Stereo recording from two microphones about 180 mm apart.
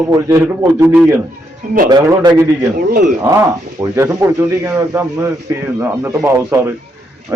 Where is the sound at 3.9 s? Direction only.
15° right (ahead or behind).